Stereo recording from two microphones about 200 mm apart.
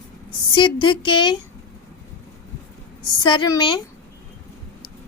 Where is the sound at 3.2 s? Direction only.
20° left (ahead or behind).